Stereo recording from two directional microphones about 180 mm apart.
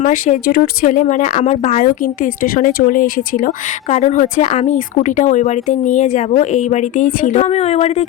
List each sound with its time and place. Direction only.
0.0 s speech: 45° left (ahead or behind)